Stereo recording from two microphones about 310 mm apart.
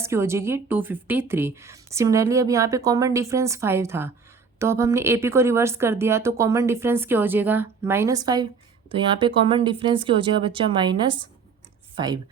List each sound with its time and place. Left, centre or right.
0.0 s a woman's voice: centre